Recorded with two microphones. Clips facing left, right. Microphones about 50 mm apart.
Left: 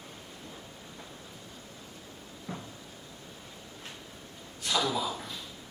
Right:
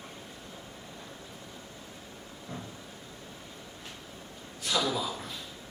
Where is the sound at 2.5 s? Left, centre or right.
Left.